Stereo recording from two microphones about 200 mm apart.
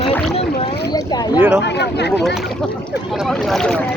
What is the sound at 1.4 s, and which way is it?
Speech, 5° right (ahead or behind).